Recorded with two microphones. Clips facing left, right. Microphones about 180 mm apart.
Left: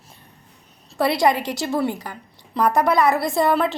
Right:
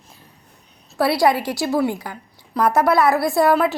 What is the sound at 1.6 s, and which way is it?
A woman's voice, 5° right (ahead or behind).